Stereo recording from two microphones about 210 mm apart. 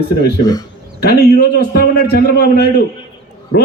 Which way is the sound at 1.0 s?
50° left (ahead or behind).